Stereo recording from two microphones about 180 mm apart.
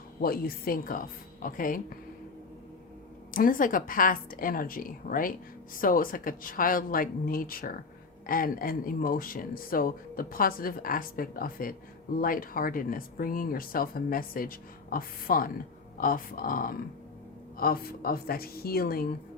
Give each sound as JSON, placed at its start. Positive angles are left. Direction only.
{"t": 0.2, "sound": "speech", "side_deg": 55}
{"t": 3.3, "sound": "a woman's voice", "side_deg": 50}